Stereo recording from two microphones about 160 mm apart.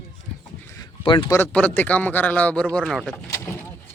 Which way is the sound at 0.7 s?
30° left (ahead or behind).